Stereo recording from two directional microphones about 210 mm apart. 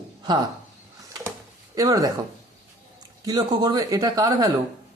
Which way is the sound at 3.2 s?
20° right (ahead or behind).